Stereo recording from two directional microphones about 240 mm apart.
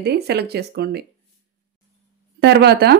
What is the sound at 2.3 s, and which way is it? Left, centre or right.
Speech, right.